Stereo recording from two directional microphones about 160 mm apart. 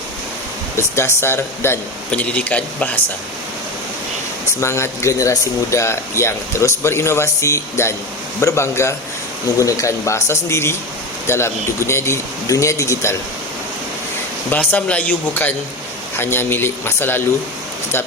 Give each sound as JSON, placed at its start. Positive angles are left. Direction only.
{"t": 0.8, "sound": "speech", "side_deg": 15}
{"t": 4.6, "sound": "speech", "side_deg": 15}
{"t": 14.5, "sound": "speech", "side_deg": 10}